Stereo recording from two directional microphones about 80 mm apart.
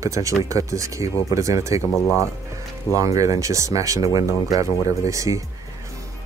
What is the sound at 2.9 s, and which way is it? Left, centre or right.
Speech, right.